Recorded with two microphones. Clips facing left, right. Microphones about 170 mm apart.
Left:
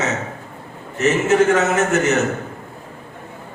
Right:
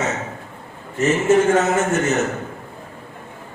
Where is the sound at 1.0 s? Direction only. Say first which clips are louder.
Even; 70° left (ahead or behind).